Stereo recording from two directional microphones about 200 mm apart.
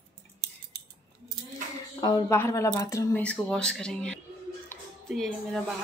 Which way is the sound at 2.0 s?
15° left (ahead or behind).